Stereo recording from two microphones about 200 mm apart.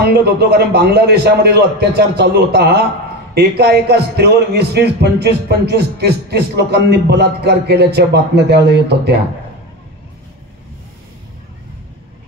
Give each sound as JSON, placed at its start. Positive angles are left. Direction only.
{"t": 0.0, "sound": "a man's voice", "side_deg": -55}